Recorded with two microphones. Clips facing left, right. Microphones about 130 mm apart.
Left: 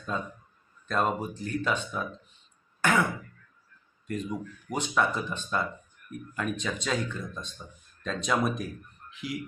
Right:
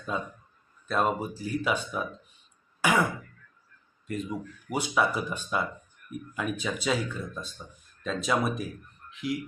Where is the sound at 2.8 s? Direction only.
10° right (ahead or behind).